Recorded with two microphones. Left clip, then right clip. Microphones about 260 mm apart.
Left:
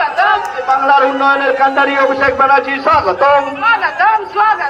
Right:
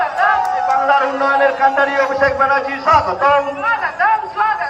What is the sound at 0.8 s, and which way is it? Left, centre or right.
A man's voice, left.